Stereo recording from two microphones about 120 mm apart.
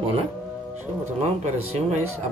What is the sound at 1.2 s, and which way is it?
Speech, 65° right (ahead or behind).